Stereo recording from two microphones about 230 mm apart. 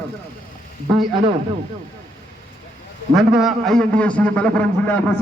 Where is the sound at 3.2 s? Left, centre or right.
Centre.